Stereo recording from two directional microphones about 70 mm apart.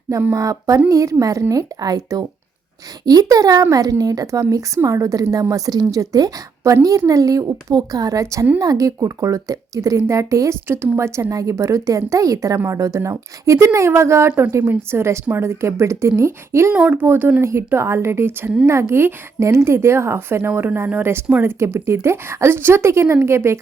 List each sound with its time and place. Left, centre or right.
0.3 s a woman's voice: right
8.5 s a woman's voice: right
16.7 s speech: right
17.4 s a woman's voice: right